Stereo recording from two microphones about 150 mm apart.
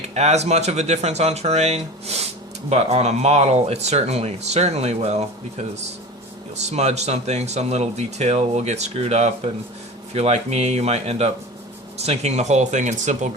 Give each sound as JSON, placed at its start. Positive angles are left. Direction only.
{"t": 0.1, "sound": "speech", "side_deg": -45}